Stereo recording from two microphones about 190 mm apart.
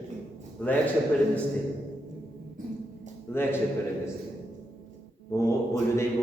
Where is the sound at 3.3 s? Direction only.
10° left (ahead or behind).